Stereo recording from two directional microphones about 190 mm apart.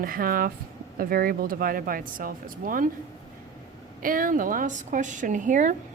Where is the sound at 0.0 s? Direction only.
50° right (ahead or behind).